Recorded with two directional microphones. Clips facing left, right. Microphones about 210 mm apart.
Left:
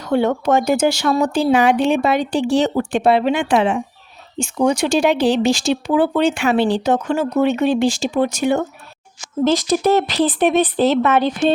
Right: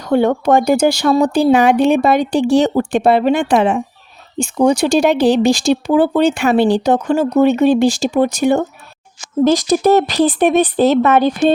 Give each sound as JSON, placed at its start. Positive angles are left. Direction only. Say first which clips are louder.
{"t": 0.0, "sound": "speech", "louder": "right 3 dB", "side_deg": -40}